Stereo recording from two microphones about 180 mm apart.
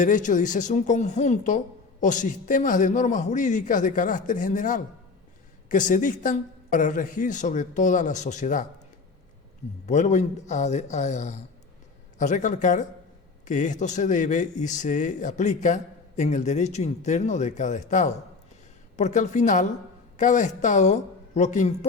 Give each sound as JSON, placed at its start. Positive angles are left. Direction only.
{"t": 0.0, "sound": "speech", "side_deg": 45}
{"t": 9.8, "sound": "speech", "side_deg": 40}